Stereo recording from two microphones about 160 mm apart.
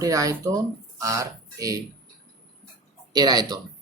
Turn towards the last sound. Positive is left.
turn(degrees=-25)  # may be behind; listen again after turning